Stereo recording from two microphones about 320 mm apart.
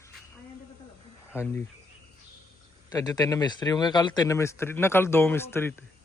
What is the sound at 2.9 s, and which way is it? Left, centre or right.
Speech, centre.